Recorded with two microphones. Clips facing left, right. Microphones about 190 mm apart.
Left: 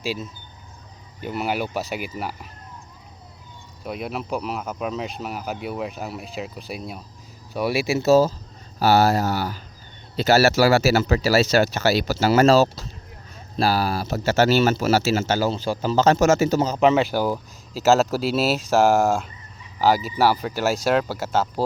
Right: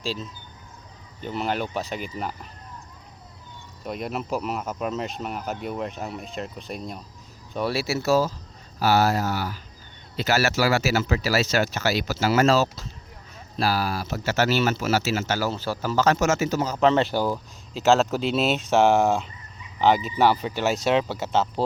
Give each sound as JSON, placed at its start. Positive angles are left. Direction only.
{"t": 0.0, "sound": "speech", "side_deg": 10}
{"t": 3.8, "sound": "speech", "side_deg": 5}
{"t": 16.7, "sound": "speech", "side_deg": 10}